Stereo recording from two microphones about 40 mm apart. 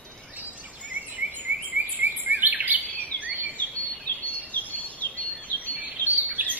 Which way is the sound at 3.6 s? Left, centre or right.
Left.